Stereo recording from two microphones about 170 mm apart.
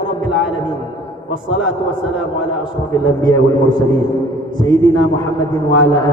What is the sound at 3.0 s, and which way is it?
A man's voice, 25° left (ahead or behind).